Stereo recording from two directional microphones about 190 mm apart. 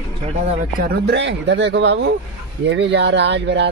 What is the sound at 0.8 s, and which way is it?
Speech, 65° right (ahead or behind).